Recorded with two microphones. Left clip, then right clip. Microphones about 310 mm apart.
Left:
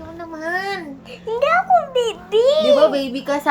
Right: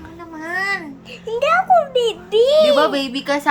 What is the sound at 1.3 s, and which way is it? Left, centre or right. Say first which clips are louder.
A child's voice: right 1 dB; centre.